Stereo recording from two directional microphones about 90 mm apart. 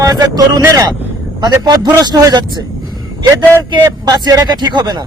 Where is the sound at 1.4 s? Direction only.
50° right (ahead or behind).